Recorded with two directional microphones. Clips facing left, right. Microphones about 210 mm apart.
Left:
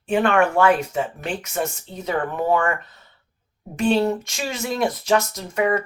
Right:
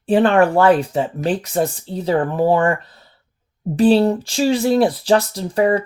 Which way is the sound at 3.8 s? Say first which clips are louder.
Right 6 dB; 35° right (ahead or behind).